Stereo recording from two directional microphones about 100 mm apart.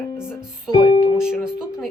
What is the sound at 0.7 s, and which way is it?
Music, 65° left (ahead or behind).